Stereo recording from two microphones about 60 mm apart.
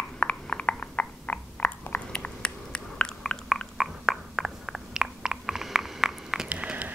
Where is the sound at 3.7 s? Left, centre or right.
Centre.